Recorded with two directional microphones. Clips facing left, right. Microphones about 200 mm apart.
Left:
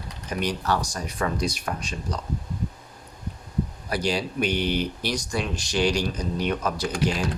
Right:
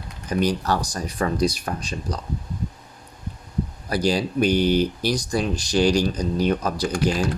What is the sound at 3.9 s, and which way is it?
Speech, 40° right (ahead or behind).